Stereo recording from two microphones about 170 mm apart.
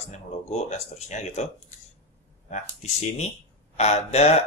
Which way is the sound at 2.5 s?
40° left (ahead or behind).